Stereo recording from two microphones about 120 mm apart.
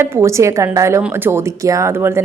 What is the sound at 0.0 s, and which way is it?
Speech, 20° right (ahead or behind).